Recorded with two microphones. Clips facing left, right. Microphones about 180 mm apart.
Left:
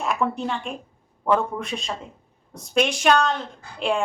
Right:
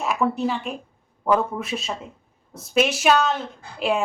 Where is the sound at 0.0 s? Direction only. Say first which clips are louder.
Right 2 dB; centre (ahead or behind).